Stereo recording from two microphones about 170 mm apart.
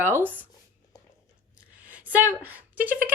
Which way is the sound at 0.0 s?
10° right (ahead or behind).